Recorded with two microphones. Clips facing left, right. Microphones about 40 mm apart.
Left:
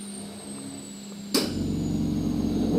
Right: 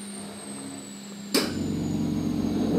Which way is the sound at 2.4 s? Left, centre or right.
Centre.